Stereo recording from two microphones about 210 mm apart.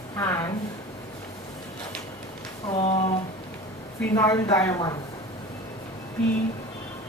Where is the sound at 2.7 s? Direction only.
30° left (ahead or behind).